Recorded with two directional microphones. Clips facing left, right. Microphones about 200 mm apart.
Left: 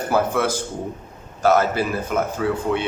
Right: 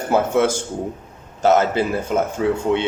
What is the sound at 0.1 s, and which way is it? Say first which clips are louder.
Speech: right 4 dB; 25° right (ahead or behind).